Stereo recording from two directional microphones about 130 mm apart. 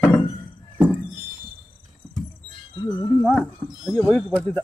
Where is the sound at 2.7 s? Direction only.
25° left (ahead or behind).